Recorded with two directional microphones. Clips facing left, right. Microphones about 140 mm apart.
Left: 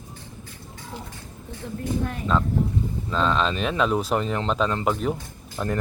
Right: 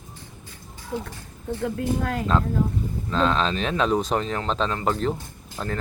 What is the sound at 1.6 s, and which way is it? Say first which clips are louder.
Speech: right 2 dB; 80° right.